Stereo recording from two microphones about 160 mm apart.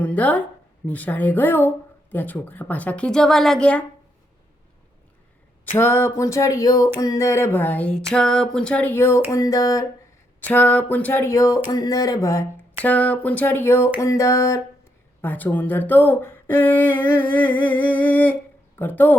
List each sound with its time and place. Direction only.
0.0 s speech: 10° left (ahead or behind)
5.7 s speech: 15° left (ahead or behind)
9.3 s a sound: 20° left (ahead or behind)
10.4 s speech: 10° left (ahead or behind)
12.8 s speech: 10° left (ahead or behind)
14.0 s a sound: 20° left (ahead or behind)
15.2 s speech: 10° left (ahead or behind)